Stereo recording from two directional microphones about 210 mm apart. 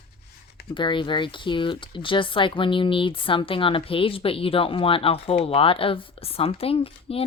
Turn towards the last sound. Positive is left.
turn(degrees=25)  # may be behind; listen again after turning